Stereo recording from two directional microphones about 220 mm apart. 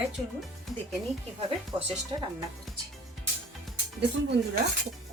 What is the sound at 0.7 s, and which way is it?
Speech, centre (ahead or behind).